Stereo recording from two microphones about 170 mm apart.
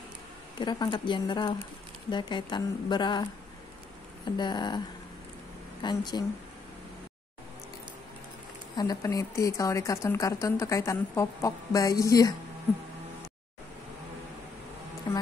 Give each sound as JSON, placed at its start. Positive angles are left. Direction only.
{"t": 0.6, "sound": "speech", "side_deg": 25}
{"t": 4.4, "sound": "speech", "side_deg": 25}
{"t": 8.7, "sound": "speech", "side_deg": 20}
{"t": 15.1, "sound": "music", "side_deg": 20}